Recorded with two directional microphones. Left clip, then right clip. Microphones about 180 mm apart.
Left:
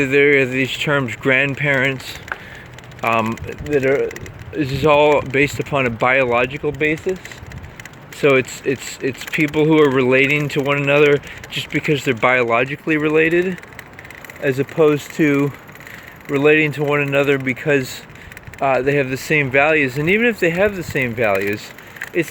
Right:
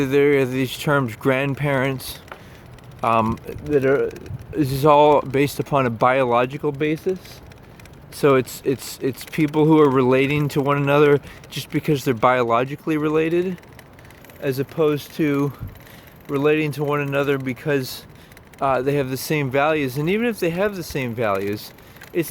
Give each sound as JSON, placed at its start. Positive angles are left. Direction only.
{"t": 0.1, "sound": "speech", "side_deg": -25}
{"t": 8.2, "sound": "speech", "side_deg": -30}